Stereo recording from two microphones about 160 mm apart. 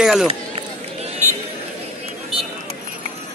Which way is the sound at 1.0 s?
45° right (ahead or behind).